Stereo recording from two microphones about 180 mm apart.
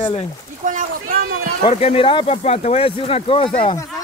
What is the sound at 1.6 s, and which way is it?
Speech, 35° left (ahead or behind).